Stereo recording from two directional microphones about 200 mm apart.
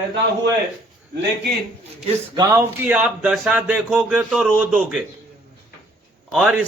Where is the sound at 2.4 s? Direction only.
15° right (ahead or behind).